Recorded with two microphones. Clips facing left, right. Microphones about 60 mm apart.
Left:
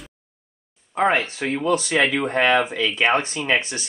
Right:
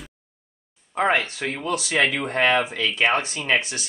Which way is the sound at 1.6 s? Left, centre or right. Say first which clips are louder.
Left 6 dB; left.